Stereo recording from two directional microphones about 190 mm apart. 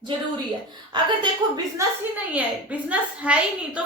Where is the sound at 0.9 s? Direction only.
25° right (ahead or behind).